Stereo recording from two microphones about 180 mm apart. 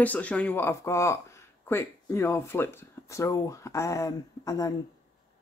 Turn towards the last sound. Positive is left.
turn(degrees=20)  # may be behind; listen again after turning